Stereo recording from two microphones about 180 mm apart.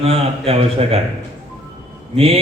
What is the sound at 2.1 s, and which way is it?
Speech, 30° right (ahead or behind).